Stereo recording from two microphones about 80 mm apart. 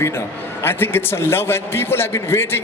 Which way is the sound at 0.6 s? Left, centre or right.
Left.